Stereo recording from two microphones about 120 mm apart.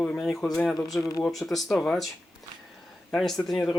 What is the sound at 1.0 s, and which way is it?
Speech, 25° left (ahead or behind).